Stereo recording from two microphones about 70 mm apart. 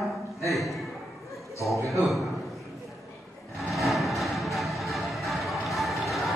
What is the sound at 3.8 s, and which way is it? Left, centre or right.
Music, centre.